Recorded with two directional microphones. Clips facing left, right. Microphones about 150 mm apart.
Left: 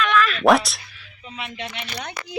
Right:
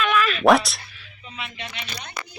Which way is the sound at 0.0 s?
5° right (ahead or behind).